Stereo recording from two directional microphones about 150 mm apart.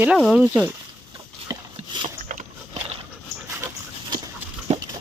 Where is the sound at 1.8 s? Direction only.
50° right (ahead or behind).